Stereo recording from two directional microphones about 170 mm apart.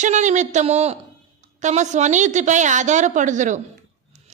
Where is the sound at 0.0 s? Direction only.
45° right (ahead or behind).